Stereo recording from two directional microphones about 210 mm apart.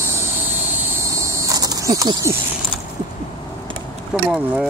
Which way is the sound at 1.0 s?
15° right (ahead or behind).